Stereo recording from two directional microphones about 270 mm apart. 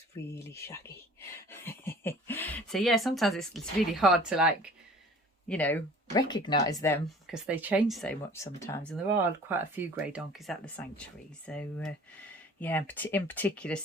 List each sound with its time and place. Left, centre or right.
0.3 s speech: centre
7.3 s speech: centre
9.5 s speech: centre